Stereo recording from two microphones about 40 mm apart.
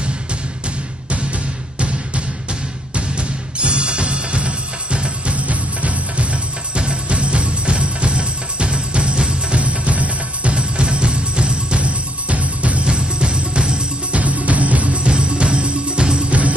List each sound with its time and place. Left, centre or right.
1.8 s music: right
9.6 s music: right
12.8 s music: right
14.1 s music: right
15.0 s music: right
16.3 s music: right